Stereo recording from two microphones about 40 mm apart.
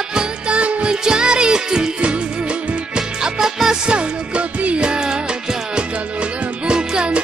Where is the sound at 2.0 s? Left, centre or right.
Right.